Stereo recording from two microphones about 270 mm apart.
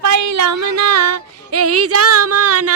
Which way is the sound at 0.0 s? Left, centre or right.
Right.